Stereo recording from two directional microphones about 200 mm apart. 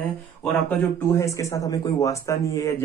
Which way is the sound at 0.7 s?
15° left (ahead or behind).